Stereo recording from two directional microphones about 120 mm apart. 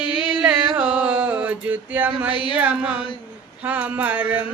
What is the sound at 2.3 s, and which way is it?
Mantra, 45° left (ahead or behind).